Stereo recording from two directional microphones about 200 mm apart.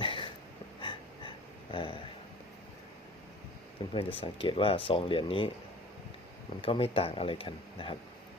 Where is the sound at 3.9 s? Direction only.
25° left (ahead or behind).